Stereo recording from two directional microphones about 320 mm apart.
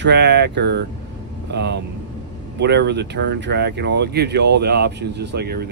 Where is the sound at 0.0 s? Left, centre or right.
Right.